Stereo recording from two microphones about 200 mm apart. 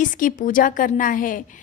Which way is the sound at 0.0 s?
40° left (ahead or behind).